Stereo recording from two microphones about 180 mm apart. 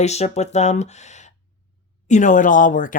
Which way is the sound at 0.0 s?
40° left (ahead or behind).